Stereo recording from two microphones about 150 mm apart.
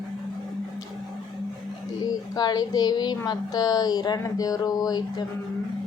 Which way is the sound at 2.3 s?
25° left (ahead or behind).